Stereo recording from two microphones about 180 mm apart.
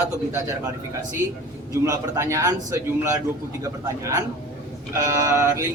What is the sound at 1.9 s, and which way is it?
A man's voice, 15° right (ahead or behind).